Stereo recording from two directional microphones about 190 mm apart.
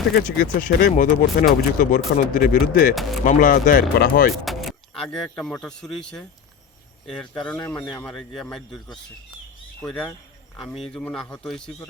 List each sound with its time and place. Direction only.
0.1 s speech: 50° left (ahead or behind)
2.9 s a man's voice: centre (ahead or behind)
3.2 s speech: 45° left (ahead or behind)
4.4 s speech: centre (ahead or behind)
7.4 s a man's voice: 5° left (ahead or behind)